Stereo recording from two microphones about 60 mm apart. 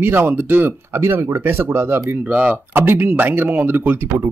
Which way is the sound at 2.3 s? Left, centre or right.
Right.